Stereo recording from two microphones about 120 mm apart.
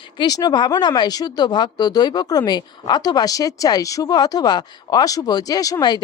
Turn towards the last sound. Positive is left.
turn(degrees=30)  # may be behind; listen again after turning